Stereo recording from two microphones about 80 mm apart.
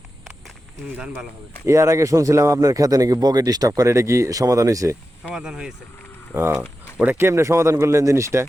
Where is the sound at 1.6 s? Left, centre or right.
Right.